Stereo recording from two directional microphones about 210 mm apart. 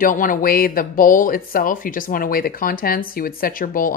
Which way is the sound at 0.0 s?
40° left (ahead or behind).